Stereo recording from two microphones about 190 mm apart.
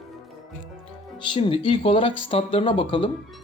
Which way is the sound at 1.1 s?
25° left (ahead or behind).